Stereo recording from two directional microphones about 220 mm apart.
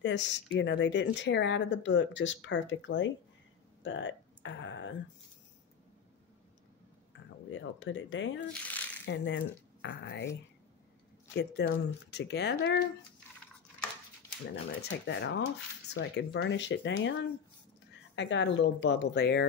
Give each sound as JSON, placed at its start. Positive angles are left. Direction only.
{"t": 0.0, "sound": "speech", "side_deg": 55}
{"t": 7.5, "sound": "speech", "side_deg": 55}
{"t": 8.5, "sound": "a sound", "side_deg": 5}
{"t": 9.0, "sound": "speech", "side_deg": 55}
{"t": 11.3, "sound": "speech", "side_deg": 50}
{"t": 14.5, "sound": "speech", "side_deg": 50}